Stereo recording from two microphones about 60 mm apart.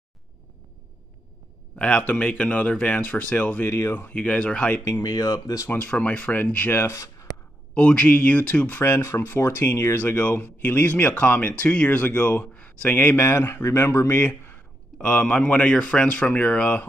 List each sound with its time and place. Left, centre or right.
1.8 s speech: centre
5.0 s speech: left
5.7 s speech: left
6.9 s speech: left
7.7 s speech: centre
8.9 s speech: left
9.2 s speech: left
10.1 s speech: left
13.2 s speech: left
15.0 s speech: centre